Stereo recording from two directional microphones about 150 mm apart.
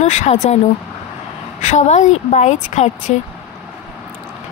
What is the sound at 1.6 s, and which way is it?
A woman's voice, 50° left (ahead or behind).